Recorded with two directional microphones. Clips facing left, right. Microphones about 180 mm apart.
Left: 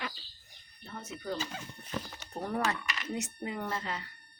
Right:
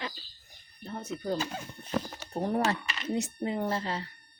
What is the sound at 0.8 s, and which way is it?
Speech, 35° right (ahead or behind).